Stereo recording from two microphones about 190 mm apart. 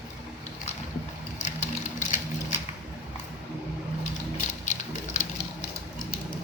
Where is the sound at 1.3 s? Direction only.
40° left (ahead or behind).